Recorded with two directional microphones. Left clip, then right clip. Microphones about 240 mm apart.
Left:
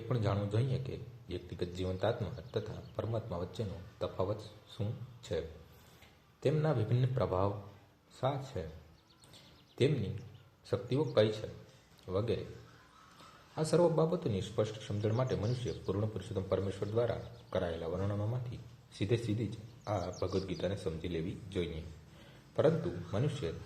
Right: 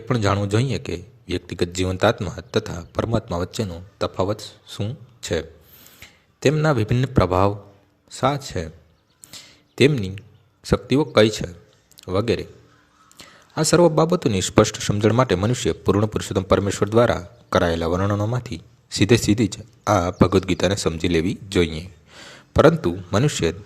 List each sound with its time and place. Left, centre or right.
0.1 s a man's voice: right
6.4 s a man's voice: right
10.6 s a man's voice: right
13.6 s a man's voice: right
23.1 s a man's voice: right